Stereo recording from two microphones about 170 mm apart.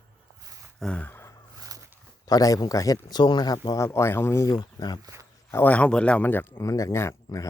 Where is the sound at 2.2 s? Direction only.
20° left (ahead or behind).